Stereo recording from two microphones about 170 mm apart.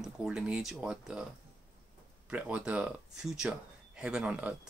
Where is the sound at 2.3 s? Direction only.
10° right (ahead or behind).